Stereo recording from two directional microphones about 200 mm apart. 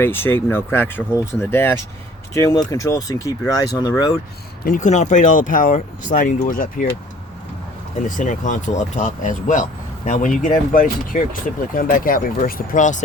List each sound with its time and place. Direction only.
0.0 s speech: 10° left (ahead or behind)
4.6 s speech: 40° left (ahead or behind)
8.0 s speech: 40° left (ahead or behind)